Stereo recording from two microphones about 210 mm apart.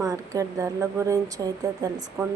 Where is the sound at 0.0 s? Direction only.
15° right (ahead or behind).